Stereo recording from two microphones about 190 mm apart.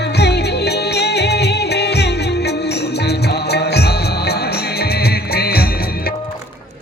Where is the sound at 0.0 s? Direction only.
60° left (ahead or behind).